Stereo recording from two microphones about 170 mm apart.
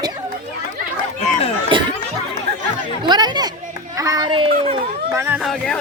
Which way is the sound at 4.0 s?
20° right (ahead or behind).